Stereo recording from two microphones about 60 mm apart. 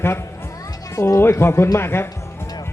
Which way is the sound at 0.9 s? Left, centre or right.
Left.